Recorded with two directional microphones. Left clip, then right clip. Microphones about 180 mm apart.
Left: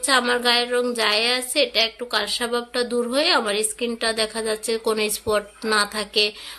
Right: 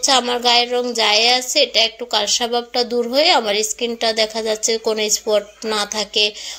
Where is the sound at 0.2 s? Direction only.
5° right (ahead or behind).